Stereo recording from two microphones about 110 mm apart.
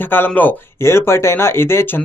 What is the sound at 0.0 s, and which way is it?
Speech, 15° left (ahead or behind).